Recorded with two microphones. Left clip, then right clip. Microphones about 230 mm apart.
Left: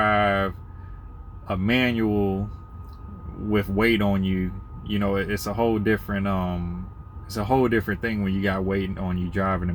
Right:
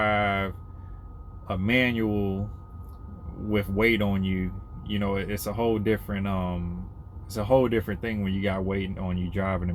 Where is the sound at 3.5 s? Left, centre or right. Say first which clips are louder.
Left 2 dB; right.